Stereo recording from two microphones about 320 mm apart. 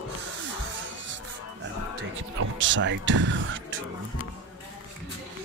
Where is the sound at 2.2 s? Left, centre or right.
Right.